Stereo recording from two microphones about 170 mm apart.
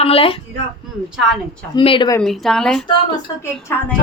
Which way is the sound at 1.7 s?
30° left (ahead or behind).